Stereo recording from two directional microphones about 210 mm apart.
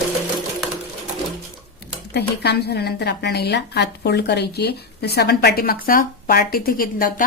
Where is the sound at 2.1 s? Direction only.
50° left (ahead or behind).